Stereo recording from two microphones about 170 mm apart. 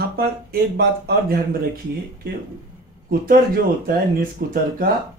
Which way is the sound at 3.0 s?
55° right (ahead or behind).